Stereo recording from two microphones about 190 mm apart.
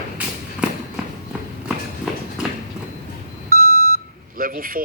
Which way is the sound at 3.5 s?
50° right (ahead or behind).